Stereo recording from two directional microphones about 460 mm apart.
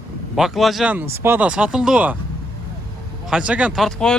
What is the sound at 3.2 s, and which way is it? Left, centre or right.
Speech, centre.